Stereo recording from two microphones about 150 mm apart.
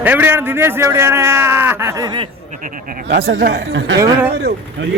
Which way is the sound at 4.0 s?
15° right (ahead or behind).